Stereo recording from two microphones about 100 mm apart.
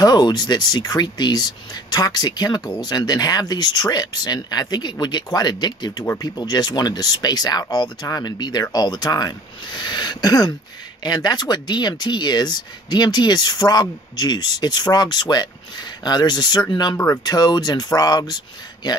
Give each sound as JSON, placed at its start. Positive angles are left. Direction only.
{"t": 0.0, "sound": "speech", "side_deg": 40}